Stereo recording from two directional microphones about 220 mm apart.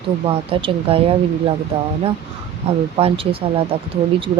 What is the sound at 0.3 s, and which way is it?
Speech, 25° right (ahead or behind).